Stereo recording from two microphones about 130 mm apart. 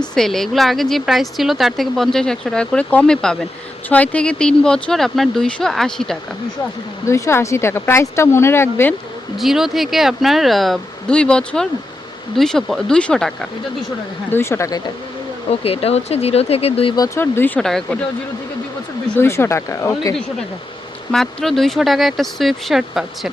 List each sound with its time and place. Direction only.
0.0 s a woman's voice: 5° left (ahead or behind)
7.1 s speech: 20° left (ahead or behind)
9.4 s a woman's voice: centre (ahead or behind)
14.3 s speech: 20° left (ahead or behind)
15.4 s speech: 50° left (ahead or behind)
17.2 s speech: 15° left (ahead or behind)
17.6 s a woman's voice: 5° left (ahead or behind)
19.1 s speech: 20° left (ahead or behind)
21.1 s a woman's voice: centre (ahead or behind)